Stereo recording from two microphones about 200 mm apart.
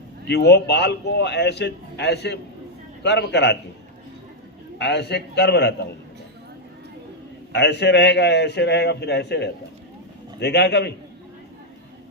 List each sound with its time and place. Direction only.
0.3 s a man's voice: 55° left (ahead or behind)
4.8 s a man's voice: 60° left (ahead or behind)
7.5 s a man's voice: 60° left (ahead or behind)